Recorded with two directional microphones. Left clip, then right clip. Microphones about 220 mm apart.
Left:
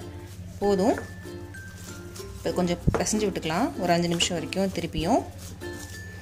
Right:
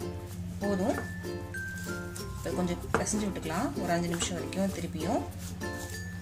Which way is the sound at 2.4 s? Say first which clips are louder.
Left 7 dB; 40° left (ahead or behind).